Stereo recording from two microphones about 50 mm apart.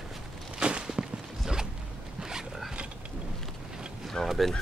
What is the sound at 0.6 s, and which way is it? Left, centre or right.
Walk, centre.